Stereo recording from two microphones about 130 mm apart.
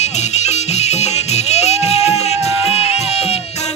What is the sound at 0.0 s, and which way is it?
Music, 60° left (ahead or behind).